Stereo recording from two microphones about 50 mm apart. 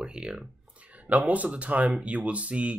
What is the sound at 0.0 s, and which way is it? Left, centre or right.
Speech, centre.